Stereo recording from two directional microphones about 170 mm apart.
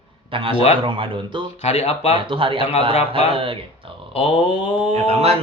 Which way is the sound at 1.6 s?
35° left (ahead or behind).